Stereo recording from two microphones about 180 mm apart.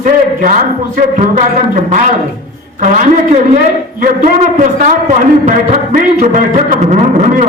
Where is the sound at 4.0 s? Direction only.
45° right (ahead or behind).